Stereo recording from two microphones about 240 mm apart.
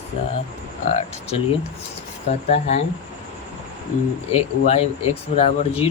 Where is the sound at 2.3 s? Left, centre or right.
Left.